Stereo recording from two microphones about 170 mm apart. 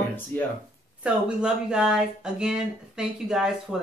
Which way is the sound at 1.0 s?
5° right (ahead or behind).